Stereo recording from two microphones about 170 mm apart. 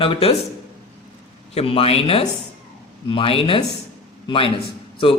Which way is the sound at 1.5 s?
35° left (ahead or behind).